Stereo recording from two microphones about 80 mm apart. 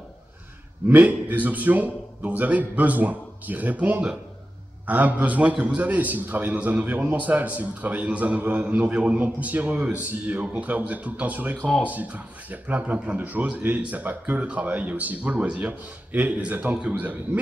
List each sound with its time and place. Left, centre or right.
0.8 s a man's voice: right